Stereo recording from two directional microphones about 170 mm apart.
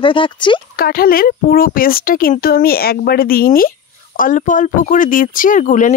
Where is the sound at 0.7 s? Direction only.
60° left (ahead or behind).